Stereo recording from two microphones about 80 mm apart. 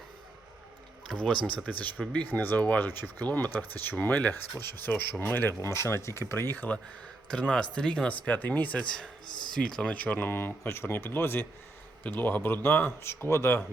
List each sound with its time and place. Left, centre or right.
1.2 s speech: centre
5.5 s speech: left
7.5 s speech: centre; by 13.6 s left